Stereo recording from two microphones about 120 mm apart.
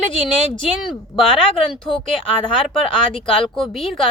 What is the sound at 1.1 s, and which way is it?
Speech, 35° left (ahead or behind).